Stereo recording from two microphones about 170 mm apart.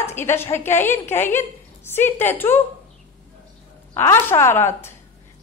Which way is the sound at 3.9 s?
15° left (ahead or behind).